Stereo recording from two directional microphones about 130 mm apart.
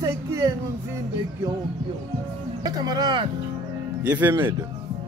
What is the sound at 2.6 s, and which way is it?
Speech, 30° right (ahead or behind).